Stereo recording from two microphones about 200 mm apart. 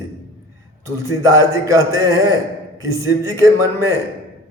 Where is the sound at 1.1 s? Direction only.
15° right (ahead or behind).